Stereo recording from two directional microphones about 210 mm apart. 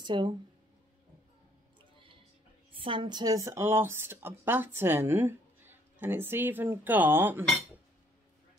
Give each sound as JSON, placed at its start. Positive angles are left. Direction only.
{"t": 0.0, "sound": "speech", "side_deg": -20}
{"t": 2.7, "sound": "a woman's voice", "side_deg": -25}